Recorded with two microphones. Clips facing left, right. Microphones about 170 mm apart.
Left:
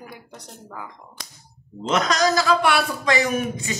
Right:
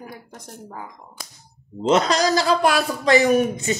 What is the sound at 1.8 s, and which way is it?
Speech, 30° right (ahead or behind).